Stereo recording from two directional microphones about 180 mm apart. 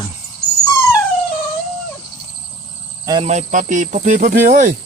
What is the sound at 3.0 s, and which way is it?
Speech, 25° right (ahead or behind).